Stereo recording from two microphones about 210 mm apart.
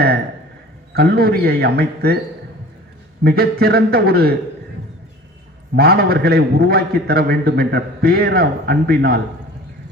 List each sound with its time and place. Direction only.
0.9 s a man's voice: 50° right (ahead or behind)
3.2 s a man's voice: 50° right (ahead or behind)
5.7 s a man's voice: 50° right (ahead or behind)